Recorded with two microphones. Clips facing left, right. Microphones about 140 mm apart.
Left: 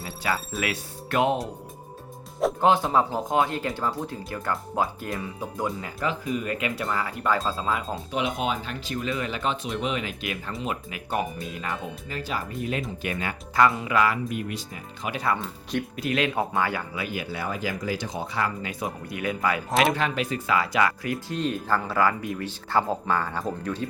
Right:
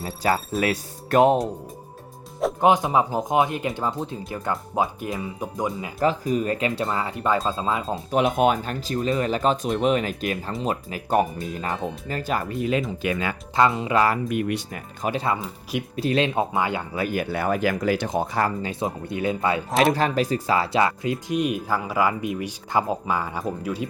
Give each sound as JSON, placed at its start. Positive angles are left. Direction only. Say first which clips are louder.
{"t": 0.0, "sound": "speech", "louder": "right 5 dB", "side_deg": -35}
{"t": 2.6, "sound": "speech", "louder": "right 3 dB", "side_deg": -15}
{"t": 6.0, "sound": "speech", "louder": "right 7 dB", "side_deg": -40}
{"t": 8.1, "sound": "speech", "louder": "right 8 dB", "side_deg": -50}
{"t": 13.6, "sound": "speech", "louder": "right 2 dB", "side_deg": -25}
{"t": 14.3, "sound": "speech", "louder": "right 6 dB", "side_deg": -65}
{"t": 15.0, "sound": "speech", "louder": "right 3 dB", "side_deg": -30}
{"t": 16.9, "sound": "speech", "louder": "right 6 dB", "side_deg": -45}
{"t": 18.7, "sound": "speech", "louder": "right 5 dB", "side_deg": -25}
{"t": 19.9, "sound": "speech", "louder": "right 5 dB", "side_deg": -35}